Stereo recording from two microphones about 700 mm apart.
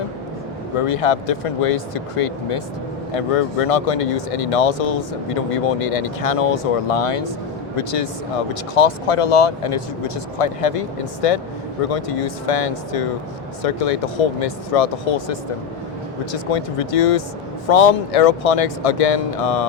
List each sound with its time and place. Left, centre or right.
0.9 s speech: left
16.3 s speech: left